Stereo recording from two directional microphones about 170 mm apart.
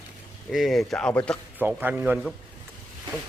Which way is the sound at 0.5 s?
Centre (ahead or behind).